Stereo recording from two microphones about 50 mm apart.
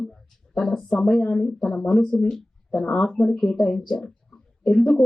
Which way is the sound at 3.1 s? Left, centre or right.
Centre.